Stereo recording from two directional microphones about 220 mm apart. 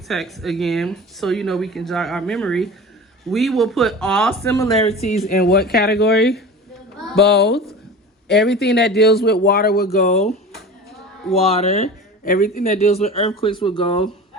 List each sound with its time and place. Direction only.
0.1 s speech: centre (ahead or behind)
4.4 s speech: 15° left (ahead or behind)
4.9 s speech: 30° left (ahead or behind)
5.3 s speech: 45° left (ahead or behind)
7.3 s speech: 50° left (ahead or behind)
10.1 s speech: 30° left (ahead or behind)